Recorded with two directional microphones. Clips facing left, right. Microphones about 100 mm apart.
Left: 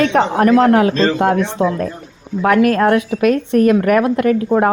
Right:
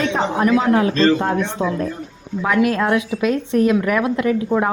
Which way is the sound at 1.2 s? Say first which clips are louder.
Left 5 dB; 85° left.